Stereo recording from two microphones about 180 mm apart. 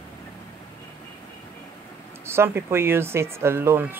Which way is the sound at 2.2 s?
15° right (ahead or behind).